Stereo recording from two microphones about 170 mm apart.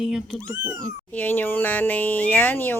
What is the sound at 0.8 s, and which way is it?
Speech, 10° left (ahead or behind).